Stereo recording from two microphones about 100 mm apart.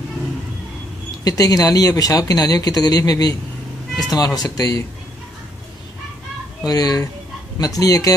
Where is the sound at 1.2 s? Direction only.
40° left (ahead or behind).